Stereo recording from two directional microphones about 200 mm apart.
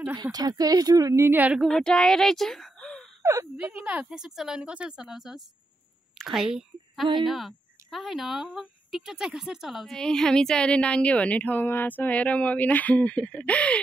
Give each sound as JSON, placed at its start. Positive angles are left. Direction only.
{"t": 0.0, "sound": "speech", "side_deg": -15}
{"t": 3.2, "sound": "whimper", "side_deg": -15}
{"t": 3.5, "sound": "a woman's voice", "side_deg": -5}